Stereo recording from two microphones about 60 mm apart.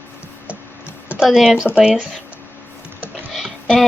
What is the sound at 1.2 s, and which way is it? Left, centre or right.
Speech, centre.